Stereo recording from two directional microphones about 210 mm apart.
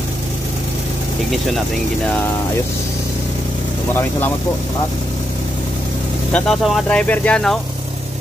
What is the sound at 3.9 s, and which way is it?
Speech, 10° left (ahead or behind).